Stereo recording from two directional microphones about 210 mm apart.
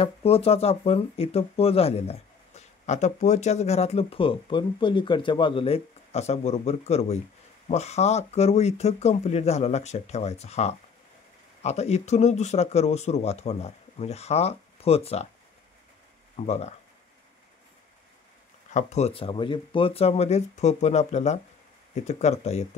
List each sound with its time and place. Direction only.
0.0 s speech: 30° left (ahead or behind)
16.3 s speech: 30° left (ahead or behind)
18.7 s speech: 35° left (ahead or behind)